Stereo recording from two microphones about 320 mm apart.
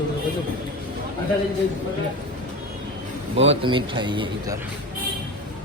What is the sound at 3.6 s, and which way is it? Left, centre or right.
Speech, centre.